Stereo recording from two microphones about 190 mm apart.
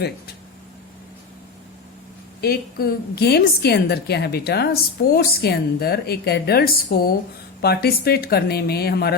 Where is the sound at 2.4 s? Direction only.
55° left (ahead or behind).